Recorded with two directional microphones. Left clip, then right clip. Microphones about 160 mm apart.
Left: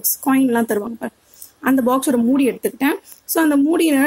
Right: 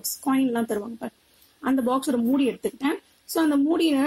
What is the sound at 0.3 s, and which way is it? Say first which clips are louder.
Speech: left 7 dB; 15° left (ahead or behind).